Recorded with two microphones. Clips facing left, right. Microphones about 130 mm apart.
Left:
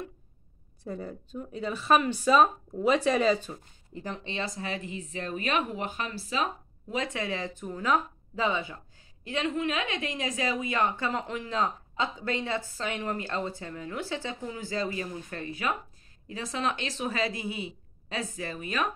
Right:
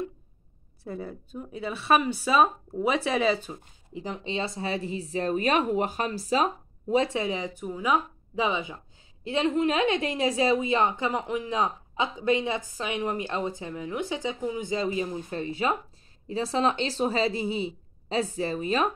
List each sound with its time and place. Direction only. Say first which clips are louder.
0.8 s a woman's voice: right 1 dB; 5° right (ahead or behind)
9.2 s a woman's voice: right 5 dB; 30° right (ahead or behind)